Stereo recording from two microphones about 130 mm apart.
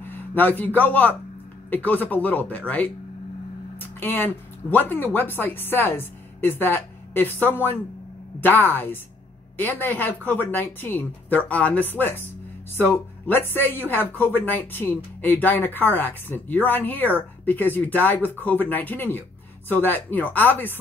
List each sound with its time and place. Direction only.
0.0 s speech: 15° left (ahead or behind)
4.0 s speech: 15° left (ahead or behind)